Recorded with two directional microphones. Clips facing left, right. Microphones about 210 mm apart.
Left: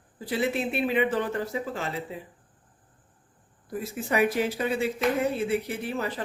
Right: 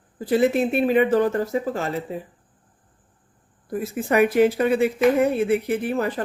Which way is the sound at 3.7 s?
50° right (ahead or behind).